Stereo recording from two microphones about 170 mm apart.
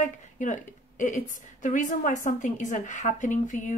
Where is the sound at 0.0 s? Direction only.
50° left (ahead or behind).